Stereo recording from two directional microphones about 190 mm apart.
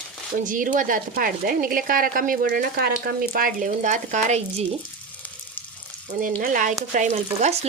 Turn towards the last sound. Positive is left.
turn(degrees=-35)  # may be behind; listen again after turning